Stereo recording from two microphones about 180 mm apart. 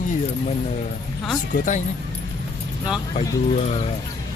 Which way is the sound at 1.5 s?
45° left (ahead or behind).